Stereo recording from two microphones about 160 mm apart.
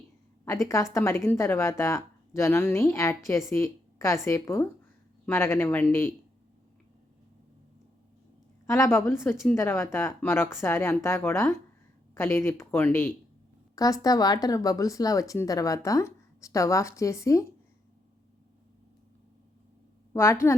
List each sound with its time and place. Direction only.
0.4 s a woman's voice: 20° left (ahead or behind)
8.6 s speech: 15° left (ahead or behind)
20.1 s speech: 15° left (ahead or behind)